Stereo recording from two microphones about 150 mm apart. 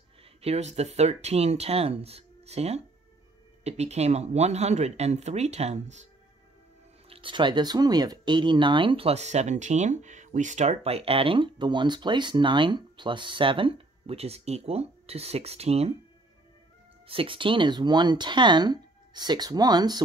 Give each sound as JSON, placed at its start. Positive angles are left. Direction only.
{"t": 0.4, "sound": "speech", "side_deg": -45}
{"t": 7.1, "sound": "speech", "side_deg": -35}
{"t": 17.1, "sound": "speech", "side_deg": -35}